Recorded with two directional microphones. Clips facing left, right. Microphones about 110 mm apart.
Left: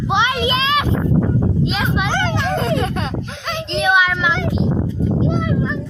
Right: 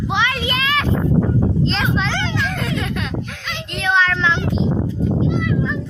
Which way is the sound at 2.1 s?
50° left (ahead or behind).